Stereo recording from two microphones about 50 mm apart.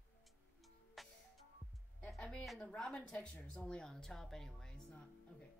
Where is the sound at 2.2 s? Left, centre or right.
Left.